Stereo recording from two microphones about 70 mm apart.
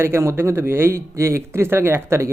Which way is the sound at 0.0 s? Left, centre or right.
Right.